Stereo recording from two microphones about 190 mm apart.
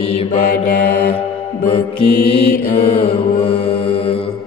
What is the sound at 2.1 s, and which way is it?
Mantra, 30° left (ahead or behind).